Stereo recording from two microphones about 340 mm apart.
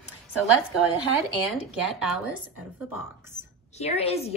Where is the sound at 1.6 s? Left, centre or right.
Centre.